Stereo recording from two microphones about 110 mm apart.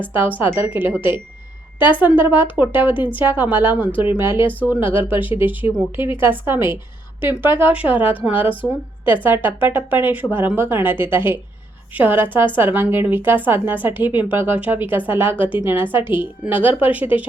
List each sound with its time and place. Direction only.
0.1 s a woman's voice: 15° right (ahead or behind)
1.8 s speech: 15° right (ahead or behind)
2.1 s speech: 45° left (ahead or behind)
2.6 s a woman's voice: 15° right (ahead or behind)